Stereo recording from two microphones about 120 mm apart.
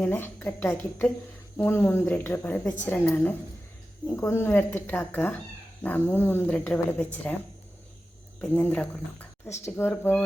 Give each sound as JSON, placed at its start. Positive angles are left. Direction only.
{"t": 0.0, "sound": "speech", "side_deg": 15}
{"t": 8.4, "sound": "speech", "side_deg": 15}